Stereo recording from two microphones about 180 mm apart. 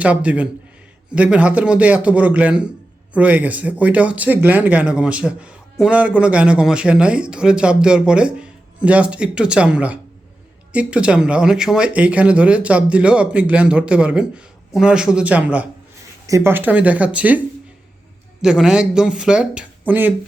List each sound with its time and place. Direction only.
0.0 s speech: 5° right (ahead or behind)
18.4 s speech: 5° right (ahead or behind)